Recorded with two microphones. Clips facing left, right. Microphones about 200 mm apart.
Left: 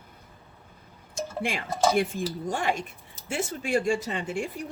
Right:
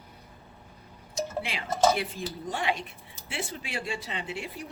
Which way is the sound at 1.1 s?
50° left (ahead or behind).